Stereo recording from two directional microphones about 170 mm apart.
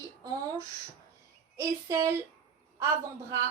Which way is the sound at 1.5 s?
20° right (ahead or behind).